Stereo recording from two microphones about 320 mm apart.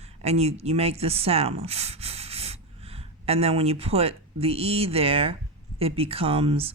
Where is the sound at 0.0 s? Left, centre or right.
Centre.